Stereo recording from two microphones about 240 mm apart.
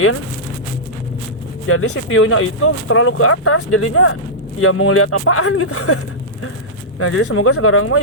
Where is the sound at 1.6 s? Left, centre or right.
Left.